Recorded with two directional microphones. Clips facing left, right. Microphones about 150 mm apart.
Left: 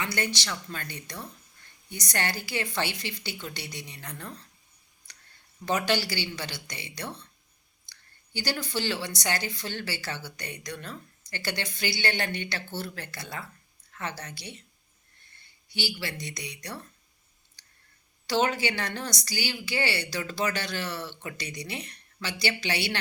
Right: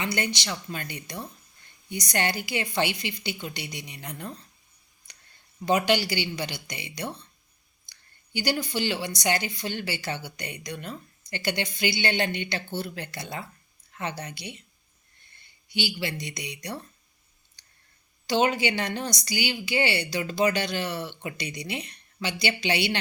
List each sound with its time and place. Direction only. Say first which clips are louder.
0.0 s a woman's voice: right 2 dB; 20° right (ahead or behind)
5.1 s a sound: even; 15° right (ahead or behind)
5.6 s speech: right 4 dB; 15° right (ahead or behind)
15.7 s a woman's voice: right 4 dB; 20° right (ahead or behind)
17.6 s a sound: left 1 dB; 20° right (ahead or behind)
18.3 s speech: right 2 dB; 15° right (ahead or behind)